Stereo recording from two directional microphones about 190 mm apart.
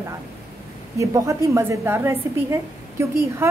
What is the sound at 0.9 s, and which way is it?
A woman's voice, 15° right (ahead or behind).